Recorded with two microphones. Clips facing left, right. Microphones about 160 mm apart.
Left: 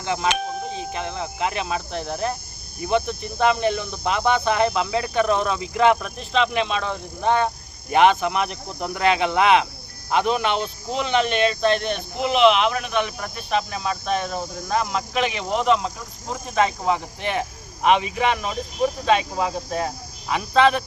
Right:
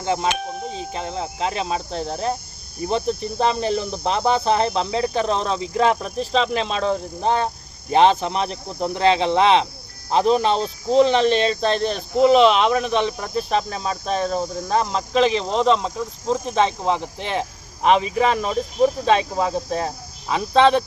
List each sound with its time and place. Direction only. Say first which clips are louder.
0.0 s speech: right 1 dB; 35° right (ahead or behind)